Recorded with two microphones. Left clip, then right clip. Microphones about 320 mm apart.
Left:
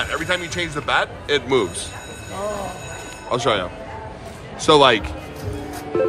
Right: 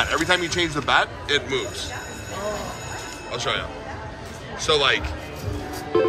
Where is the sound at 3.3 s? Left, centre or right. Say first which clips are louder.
Left 6 dB; centre.